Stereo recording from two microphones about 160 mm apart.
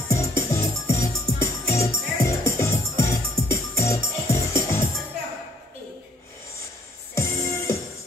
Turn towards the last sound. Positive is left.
turn(degrees=15)  # may be behind; listen again after turning